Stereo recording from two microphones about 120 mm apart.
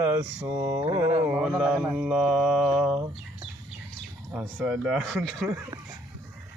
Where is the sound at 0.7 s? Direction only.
35° right (ahead or behind).